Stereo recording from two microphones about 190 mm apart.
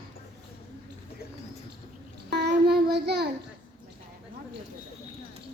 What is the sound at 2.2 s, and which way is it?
Child singing, 60° right (ahead or behind).